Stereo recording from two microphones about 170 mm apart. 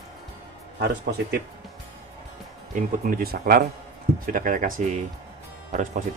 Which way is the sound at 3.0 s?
60° right (ahead or behind).